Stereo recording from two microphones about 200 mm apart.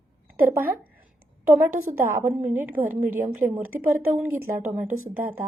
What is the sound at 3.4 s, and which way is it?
Speech, 40° right (ahead or behind).